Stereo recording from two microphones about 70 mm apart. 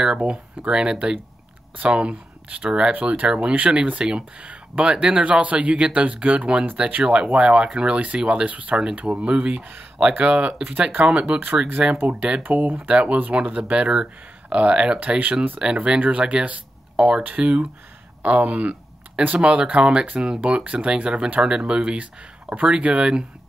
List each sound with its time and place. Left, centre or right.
0.0 s speech: centre